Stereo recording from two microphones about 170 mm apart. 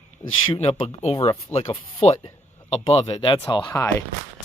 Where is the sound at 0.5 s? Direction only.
35° left (ahead or behind).